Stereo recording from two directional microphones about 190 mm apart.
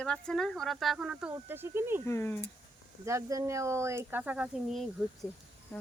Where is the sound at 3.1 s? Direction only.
15° right (ahead or behind).